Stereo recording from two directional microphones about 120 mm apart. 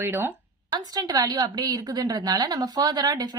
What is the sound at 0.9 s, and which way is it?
A woman's voice, 35° right (ahead or behind).